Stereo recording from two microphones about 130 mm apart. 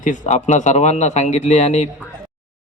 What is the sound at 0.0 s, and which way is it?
A man's voice, 70° left (ahead or behind).